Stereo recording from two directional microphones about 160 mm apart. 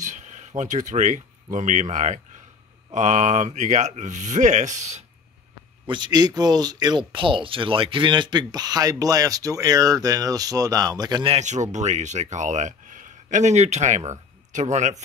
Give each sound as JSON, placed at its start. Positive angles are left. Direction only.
{"t": 0.0, "sound": "speech", "side_deg": -50}
{"t": 5.9, "sound": "speech", "side_deg": -25}
{"t": 11.3, "sound": "speech", "side_deg": -50}